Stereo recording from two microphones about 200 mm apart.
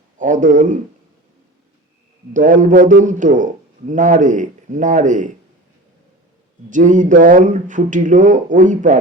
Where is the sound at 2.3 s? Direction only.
40° right (ahead or behind).